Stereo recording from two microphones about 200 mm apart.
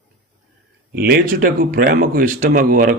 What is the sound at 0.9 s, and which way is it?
Speech, 50° right (ahead or behind).